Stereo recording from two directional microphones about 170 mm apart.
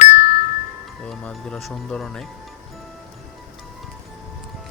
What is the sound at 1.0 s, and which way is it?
Speech, 5° left (ahead or behind).